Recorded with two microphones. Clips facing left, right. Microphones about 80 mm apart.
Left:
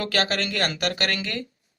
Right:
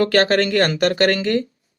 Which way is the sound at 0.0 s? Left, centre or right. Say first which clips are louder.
Right 9 dB; right.